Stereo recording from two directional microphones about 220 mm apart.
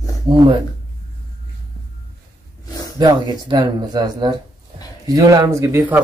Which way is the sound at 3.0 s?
20° right (ahead or behind).